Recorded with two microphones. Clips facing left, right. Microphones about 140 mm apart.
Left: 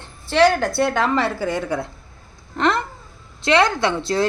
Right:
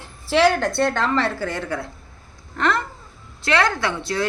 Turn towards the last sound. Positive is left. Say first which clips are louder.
# left 4 dB
turn(degrees=30)  # may be behind; listen again after turning